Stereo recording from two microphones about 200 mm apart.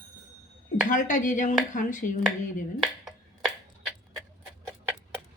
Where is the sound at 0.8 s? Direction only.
40° left (ahead or behind).